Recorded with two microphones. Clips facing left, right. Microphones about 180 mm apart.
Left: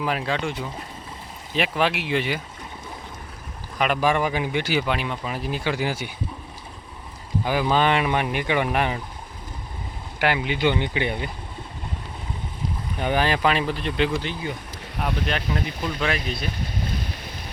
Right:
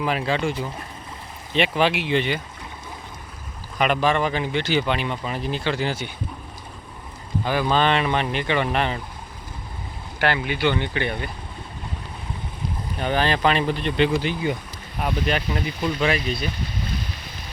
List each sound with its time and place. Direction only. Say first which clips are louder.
0.0 s speech: right 2 dB; centre (ahead or behind)
3.8 s speech: right 1 dB; centre (ahead or behind)
7.4 s speech: even; 10° left (ahead or behind)
10.2 s speech: even; 10° left (ahead or behind)
13.0 s speech: even; 10° left (ahead or behind)
14.2 s speech: right 5 dB; 10° right (ahead or behind)